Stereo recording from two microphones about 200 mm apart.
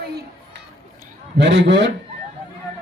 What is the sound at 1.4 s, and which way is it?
Speech, 60° right (ahead or behind).